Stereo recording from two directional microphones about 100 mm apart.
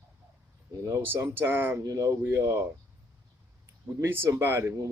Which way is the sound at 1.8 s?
35° right (ahead or behind).